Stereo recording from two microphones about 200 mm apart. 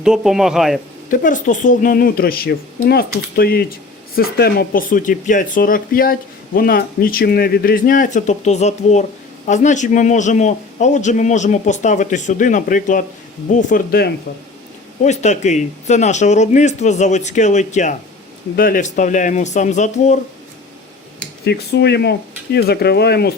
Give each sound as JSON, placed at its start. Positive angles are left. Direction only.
{"t": 0.0, "sound": "a man's voice", "side_deg": -5}
{"t": 1.1, "sound": "a man's voice", "side_deg": 40}
{"t": 15.0, "sound": "a man's voice", "side_deg": 35}
{"t": 21.4, "sound": "speech", "side_deg": 55}